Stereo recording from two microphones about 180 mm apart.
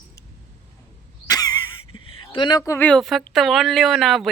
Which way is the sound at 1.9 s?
30° left (ahead or behind).